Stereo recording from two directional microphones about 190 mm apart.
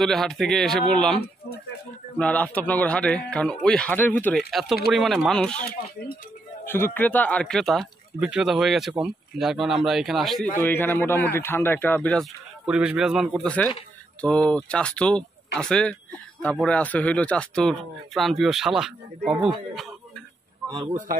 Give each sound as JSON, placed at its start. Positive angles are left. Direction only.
{"t": 0.0, "sound": "a man's voice", "side_deg": 0}
{"t": 10.5, "sound": "a man's voice", "side_deg": 10}
{"t": 19.7, "sound": "a sound", "side_deg": 0}
{"t": 20.6, "sound": "speech", "side_deg": -25}